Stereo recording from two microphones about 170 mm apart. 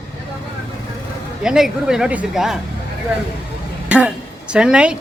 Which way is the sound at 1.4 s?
5° right (ahead or behind).